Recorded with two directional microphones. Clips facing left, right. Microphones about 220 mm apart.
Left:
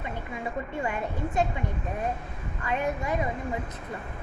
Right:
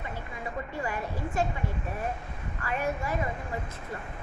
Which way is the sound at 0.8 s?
25° left (ahead or behind).